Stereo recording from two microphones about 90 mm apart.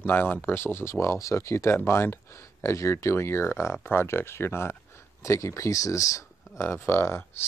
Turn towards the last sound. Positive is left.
turn(degrees=25)  # may be behind; listen again after turning